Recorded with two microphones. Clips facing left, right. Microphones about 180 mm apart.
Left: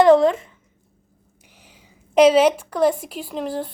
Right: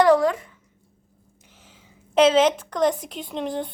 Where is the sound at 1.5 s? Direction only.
15° left (ahead or behind).